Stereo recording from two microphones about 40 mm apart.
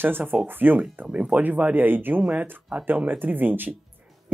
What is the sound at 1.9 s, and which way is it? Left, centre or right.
Speech, right.